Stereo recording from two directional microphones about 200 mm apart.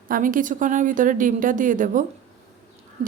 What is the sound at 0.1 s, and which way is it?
A woman's voice, 45° right (ahead or behind).